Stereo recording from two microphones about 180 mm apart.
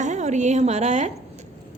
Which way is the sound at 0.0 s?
40° right (ahead or behind).